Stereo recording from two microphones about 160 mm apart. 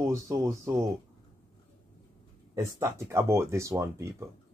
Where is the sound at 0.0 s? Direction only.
20° right (ahead or behind).